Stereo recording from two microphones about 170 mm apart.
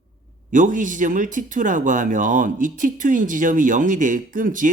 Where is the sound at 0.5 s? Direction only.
50° right (ahead or behind).